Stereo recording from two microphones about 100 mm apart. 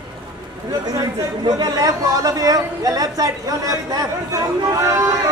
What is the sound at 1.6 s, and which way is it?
A woman's voice, 40° right (ahead or behind).